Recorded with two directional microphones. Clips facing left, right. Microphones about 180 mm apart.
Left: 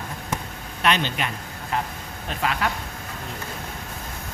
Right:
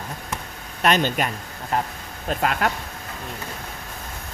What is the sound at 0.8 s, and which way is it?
Speech, 45° right (ahead or behind).